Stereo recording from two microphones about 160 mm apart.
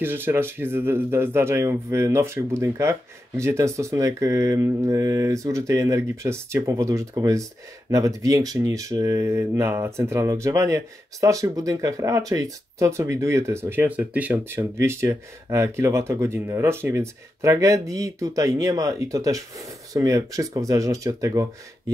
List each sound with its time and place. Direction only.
0.0 s speech: 15° right (ahead or behind)